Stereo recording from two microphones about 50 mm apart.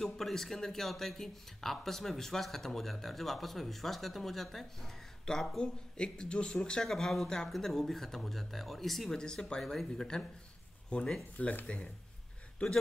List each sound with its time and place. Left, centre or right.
0.0 s speech: centre
6.8 s speech: centre
9.2 s speech: centre
10.9 s speech: left